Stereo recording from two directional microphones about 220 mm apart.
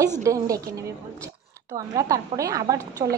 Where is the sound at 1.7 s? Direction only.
15° right (ahead or behind).